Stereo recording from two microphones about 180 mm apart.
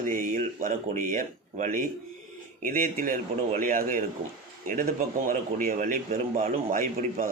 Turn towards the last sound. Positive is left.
turn(degrees=-50)  # may be behind; listen again after turning